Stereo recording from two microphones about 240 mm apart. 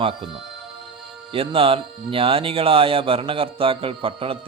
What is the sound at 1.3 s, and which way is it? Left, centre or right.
Speech, right.